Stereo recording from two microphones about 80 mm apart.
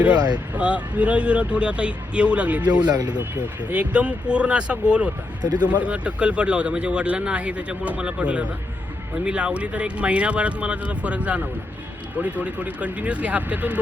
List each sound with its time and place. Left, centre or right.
0.3 s speech: centre
2.8 s speech: right
3.6 s speech: centre
5.4 s speech: right
5.6 s speech: centre